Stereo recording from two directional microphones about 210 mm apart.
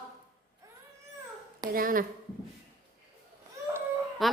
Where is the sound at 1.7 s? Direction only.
40° right (ahead or behind).